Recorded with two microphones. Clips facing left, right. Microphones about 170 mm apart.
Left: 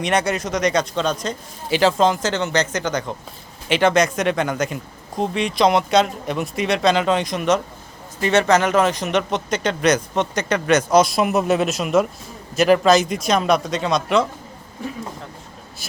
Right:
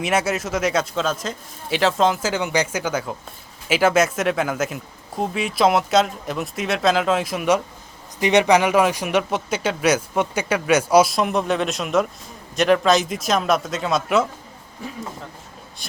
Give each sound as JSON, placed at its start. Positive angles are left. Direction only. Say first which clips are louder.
{"t": 0.0, "sound": "speech", "louder": "left 1 dB", "side_deg": -5}